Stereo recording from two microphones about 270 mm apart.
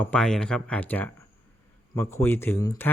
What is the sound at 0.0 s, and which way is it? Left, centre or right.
Speech, centre.